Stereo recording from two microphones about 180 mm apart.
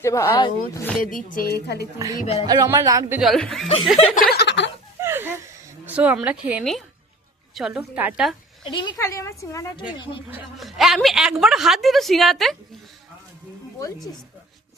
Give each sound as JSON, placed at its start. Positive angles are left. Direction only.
{"t": 0.0, "sound": "a woman's voice", "side_deg": 15}
{"t": 1.0, "sound": "a woman's voice", "side_deg": 50}
{"t": 2.0, "sound": "speech", "side_deg": -20}
{"t": 2.2, "sound": "speech", "side_deg": 35}
{"t": 2.5, "sound": "speech", "side_deg": -15}
{"t": 3.2, "sound": "a woman's voice", "side_deg": 0}
{"t": 3.9, "sound": "speech", "side_deg": 35}
{"t": 4.2, "sound": "a sound", "side_deg": 65}
{"t": 4.9, "sound": "a sound", "side_deg": -15}
{"t": 5.8, "sound": "a woman's voice", "side_deg": -10}
{"t": 8.6, "sound": "a woman's voice", "side_deg": 25}
{"t": 10.0, "sound": "speech", "side_deg": 25}
{"t": 10.3, "sound": "a woman's voice", "side_deg": 0}
{"t": 13.7, "sound": "speech", "side_deg": 20}